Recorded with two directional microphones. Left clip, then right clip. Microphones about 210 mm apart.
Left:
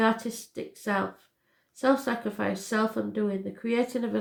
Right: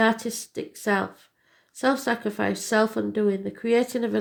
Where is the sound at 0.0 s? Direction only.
45° right (ahead or behind).